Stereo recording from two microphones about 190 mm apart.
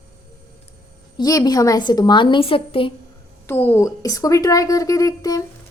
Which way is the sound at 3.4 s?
10° left (ahead or behind).